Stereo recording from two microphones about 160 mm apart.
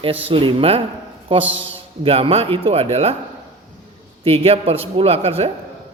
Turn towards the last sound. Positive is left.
turn(degrees=-40)  # may be behind; listen again after turning